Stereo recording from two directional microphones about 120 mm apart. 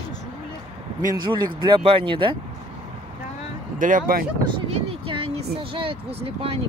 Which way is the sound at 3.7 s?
90° right.